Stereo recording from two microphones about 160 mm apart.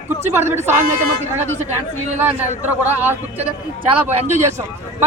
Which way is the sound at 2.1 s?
10° right (ahead or behind).